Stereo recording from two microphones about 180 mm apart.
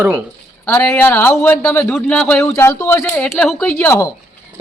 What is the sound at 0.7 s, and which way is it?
Speech, 10° left (ahead or behind).